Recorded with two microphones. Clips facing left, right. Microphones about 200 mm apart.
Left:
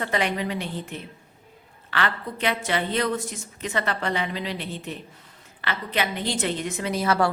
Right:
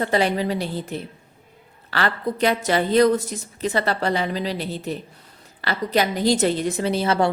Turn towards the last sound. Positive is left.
turn(degrees=-25)  # may be behind; listen again after turning